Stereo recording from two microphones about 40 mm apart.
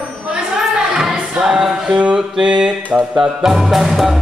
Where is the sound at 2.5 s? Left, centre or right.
Right.